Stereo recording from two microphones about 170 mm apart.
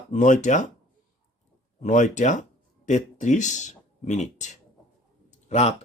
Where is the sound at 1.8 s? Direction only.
45° left (ahead or behind).